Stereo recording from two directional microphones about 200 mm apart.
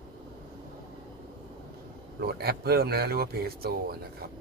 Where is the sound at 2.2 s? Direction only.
50° right (ahead or behind).